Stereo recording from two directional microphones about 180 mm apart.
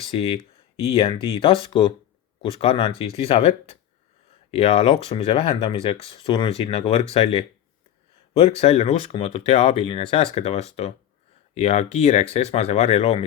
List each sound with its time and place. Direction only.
0.1 s speech: 30° left (ahead or behind)